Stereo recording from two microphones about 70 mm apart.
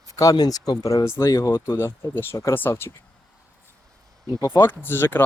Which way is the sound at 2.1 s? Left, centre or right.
Left.